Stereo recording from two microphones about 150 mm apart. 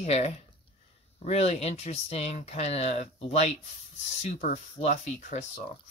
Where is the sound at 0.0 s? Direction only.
45° left (ahead or behind).